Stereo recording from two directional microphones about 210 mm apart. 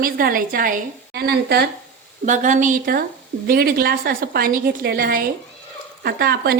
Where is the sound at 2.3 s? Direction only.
35° right (ahead or behind).